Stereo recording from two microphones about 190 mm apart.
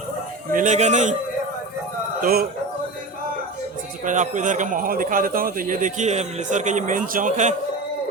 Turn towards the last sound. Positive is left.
turn(degrees=-40)  # may be behind; listen again after turning